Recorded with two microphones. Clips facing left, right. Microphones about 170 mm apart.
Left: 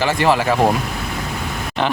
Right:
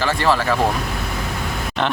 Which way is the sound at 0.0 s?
15° left (ahead or behind).